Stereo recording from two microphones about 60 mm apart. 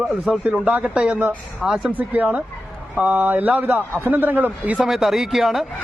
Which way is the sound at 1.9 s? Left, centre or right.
Right.